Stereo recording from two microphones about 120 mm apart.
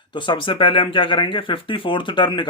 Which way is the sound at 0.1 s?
45° left (ahead or behind).